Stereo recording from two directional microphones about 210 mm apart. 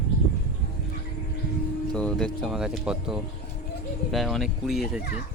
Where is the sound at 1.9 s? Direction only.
5° left (ahead or behind).